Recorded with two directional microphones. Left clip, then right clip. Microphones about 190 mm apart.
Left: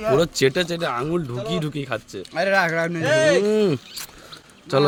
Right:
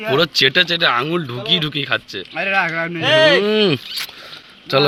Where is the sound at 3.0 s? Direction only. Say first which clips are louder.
Right 6 dB; 30° right (ahead or behind).